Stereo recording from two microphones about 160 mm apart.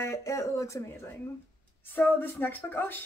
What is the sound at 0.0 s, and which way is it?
Speech, 20° left (ahead or behind).